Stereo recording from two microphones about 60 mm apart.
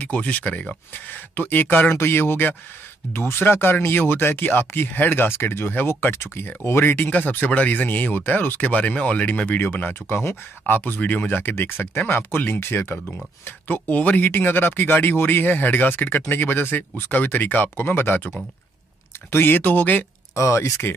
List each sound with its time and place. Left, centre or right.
0.0 s speech: left
2.0 s speech: left
13.7 s speech: left
19.3 s speech: left
20.3 s speech: left